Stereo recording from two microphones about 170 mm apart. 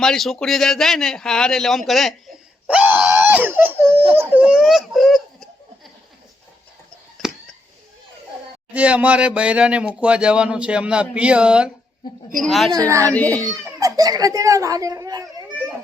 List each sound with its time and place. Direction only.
0.0 s a man's voice: centre (ahead or behind)
2.6 s wail: 10° right (ahead or behind)
4.1 s a man's voice: 10° right (ahead or behind)
7.2 s a sound: centre (ahead or behind)
8.7 s a man's voice: 10° right (ahead or behind)
12.7 s a child's voice: 20° right (ahead or behind)
13.1 s a child's voice: 10° left (ahead or behind)
13.4 s a child's voice: 20° right (ahead or behind)